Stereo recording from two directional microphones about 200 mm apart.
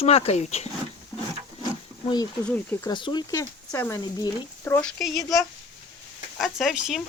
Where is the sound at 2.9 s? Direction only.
20° left (ahead or behind).